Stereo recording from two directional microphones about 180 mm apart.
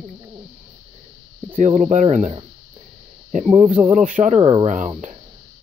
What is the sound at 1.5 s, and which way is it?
Speech, 40° right (ahead or behind).